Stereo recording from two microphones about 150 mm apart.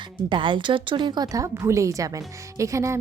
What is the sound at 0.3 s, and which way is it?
A woman's voice, 35° right (ahead or behind).